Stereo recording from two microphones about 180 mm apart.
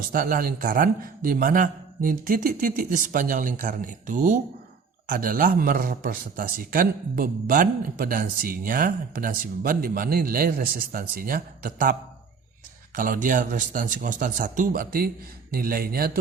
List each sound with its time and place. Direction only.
0.1 s a man's voice: 55° right (ahead or behind)